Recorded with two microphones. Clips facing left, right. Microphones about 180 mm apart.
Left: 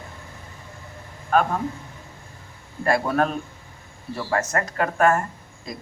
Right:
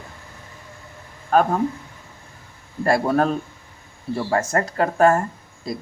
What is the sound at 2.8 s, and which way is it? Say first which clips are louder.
Speech: right 3 dB; 35° right (ahead or behind).